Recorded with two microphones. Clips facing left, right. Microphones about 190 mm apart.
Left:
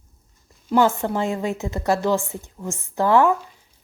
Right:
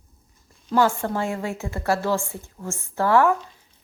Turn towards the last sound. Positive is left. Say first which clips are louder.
# left 2 dB
turn(degrees=20)  # may be behind; listen again after turning